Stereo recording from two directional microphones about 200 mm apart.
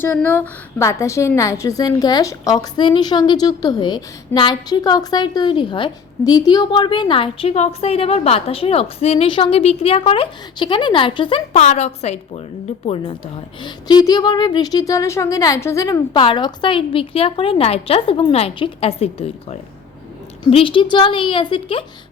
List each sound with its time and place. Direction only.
0.0 s a woman's voice: 10° left (ahead or behind); by 21.8 s 25° left (ahead or behind)